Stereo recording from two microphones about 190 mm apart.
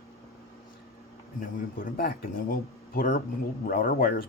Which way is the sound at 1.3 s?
50° left (ahead or behind).